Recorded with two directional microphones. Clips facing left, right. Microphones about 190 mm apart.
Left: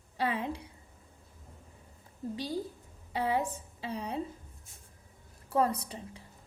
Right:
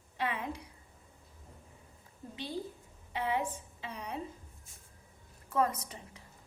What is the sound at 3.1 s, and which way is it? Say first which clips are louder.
A woman's voice: left 3 dB; 35° left (ahead or behind).